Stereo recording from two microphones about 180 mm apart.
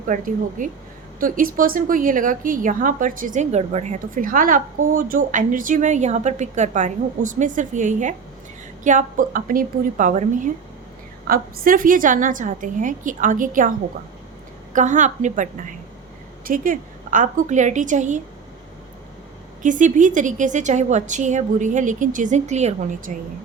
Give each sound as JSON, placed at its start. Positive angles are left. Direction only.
{"t": 0.1, "sound": "a woman's voice", "side_deg": -45}
{"t": 19.6, "sound": "a woman's voice", "side_deg": -45}